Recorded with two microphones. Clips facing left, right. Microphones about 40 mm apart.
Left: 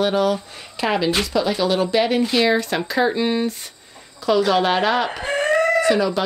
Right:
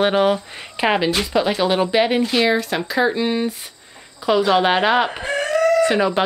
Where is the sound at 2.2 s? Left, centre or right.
Centre.